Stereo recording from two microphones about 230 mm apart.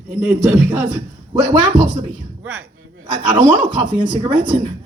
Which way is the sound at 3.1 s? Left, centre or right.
Centre.